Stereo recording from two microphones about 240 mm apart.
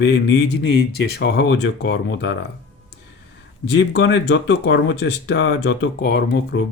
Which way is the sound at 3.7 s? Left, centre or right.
Left.